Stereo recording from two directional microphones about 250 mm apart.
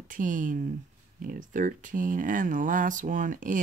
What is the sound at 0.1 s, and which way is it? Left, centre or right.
Speech, right.